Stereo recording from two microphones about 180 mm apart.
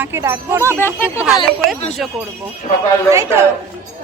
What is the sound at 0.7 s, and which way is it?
Speech, 10° left (ahead or behind).